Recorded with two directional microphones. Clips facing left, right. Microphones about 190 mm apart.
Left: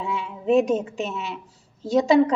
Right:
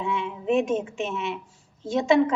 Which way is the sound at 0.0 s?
35° left (ahead or behind).